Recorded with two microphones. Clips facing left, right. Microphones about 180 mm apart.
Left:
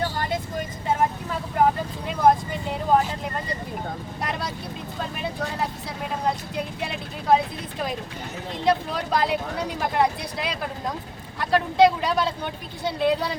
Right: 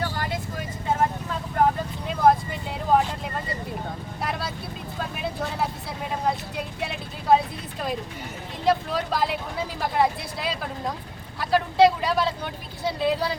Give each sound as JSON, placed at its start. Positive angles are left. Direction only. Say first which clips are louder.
{"t": 1.6, "sound": "vehicle", "louder": "left 1 dB", "side_deg": 10}
{"t": 6.8, "sound": "vehicle", "louder": "right 1 dB", "side_deg": 0}
{"t": 8.6, "sound": "vehicle", "louder": "even", "side_deg": 0}
{"t": 11.3, "sound": "a sound", "louder": "even", "side_deg": 0}
{"t": 12.8, "sound": "a woman's voice", "louder": "left 1 dB", "side_deg": 0}